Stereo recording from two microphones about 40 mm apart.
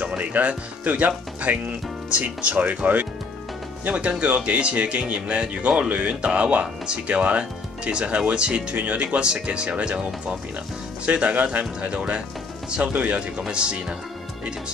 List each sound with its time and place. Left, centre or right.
0.2 s speech: right
11.1 s speech: right
13.5 s speech: right